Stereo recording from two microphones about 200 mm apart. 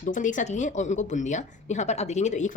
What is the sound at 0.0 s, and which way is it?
Speech, 40° left (ahead or behind).